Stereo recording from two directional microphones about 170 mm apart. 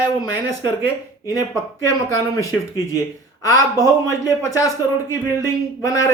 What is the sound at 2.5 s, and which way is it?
A man's voice, 20° left (ahead or behind).